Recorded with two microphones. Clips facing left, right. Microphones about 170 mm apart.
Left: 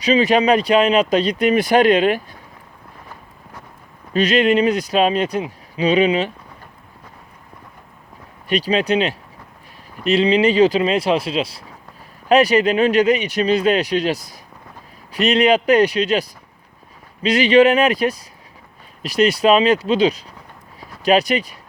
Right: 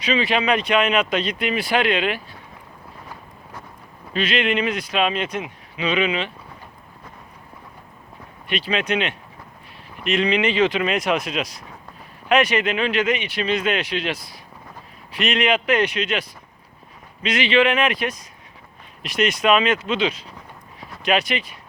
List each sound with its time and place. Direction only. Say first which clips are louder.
0.0 s speech: left 6 dB; 40° left (ahead or behind)
4.1 s speech: left 7 dB; 40° left (ahead or behind)
8.4 s speech: left 6 dB; 40° left (ahead or behind)